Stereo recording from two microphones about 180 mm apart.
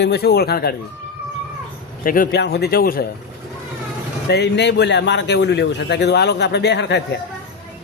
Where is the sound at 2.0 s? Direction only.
50° left (ahead or behind).